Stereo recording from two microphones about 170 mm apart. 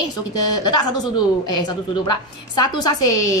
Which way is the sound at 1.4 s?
25° left (ahead or behind).